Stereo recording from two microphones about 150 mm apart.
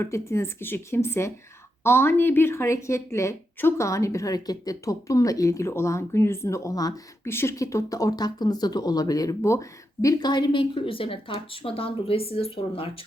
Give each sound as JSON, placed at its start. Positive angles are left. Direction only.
{"t": 0.0, "sound": "a woman's voice", "side_deg": 20}